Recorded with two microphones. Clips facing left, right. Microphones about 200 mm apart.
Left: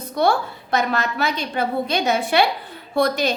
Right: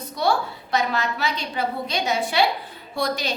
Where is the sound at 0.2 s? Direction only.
55° left (ahead or behind).